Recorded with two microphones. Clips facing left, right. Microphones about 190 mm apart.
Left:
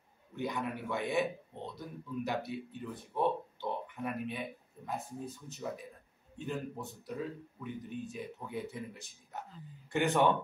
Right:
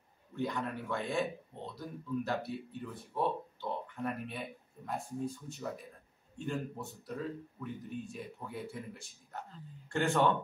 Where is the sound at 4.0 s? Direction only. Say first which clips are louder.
Left 1 dB; centre (ahead or behind).